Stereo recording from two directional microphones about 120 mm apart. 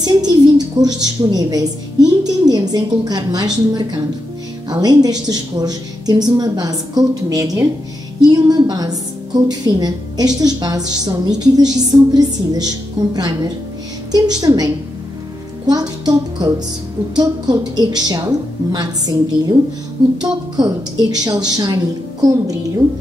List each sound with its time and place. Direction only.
0.0 s a woman's voice: 35° right (ahead or behind)